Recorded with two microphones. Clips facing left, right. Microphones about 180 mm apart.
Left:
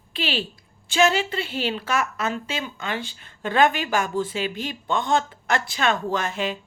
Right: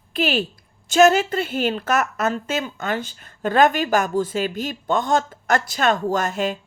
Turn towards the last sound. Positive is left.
turn(degrees=-45)  # may be behind; listen again after turning